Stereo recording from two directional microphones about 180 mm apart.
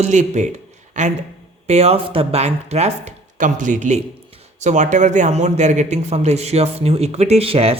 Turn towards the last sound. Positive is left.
turn(degrees=-35)  # may be behind; listen again after turning